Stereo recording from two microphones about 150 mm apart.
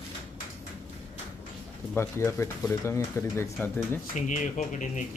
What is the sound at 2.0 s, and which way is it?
Speech, 15° left (ahead or behind).